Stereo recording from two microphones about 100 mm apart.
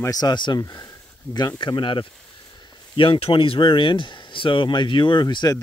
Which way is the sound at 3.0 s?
65° left (ahead or behind).